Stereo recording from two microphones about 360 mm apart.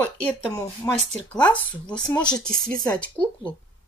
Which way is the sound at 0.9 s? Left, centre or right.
Centre.